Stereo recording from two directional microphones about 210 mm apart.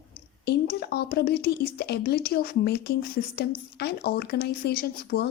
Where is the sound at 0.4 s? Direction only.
50° left (ahead or behind).